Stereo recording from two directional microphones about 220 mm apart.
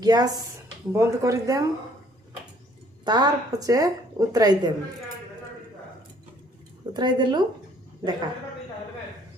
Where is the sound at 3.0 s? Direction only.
20° right (ahead or behind).